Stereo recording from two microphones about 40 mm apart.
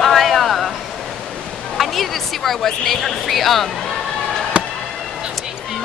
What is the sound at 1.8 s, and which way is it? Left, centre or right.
A woman's voice, centre.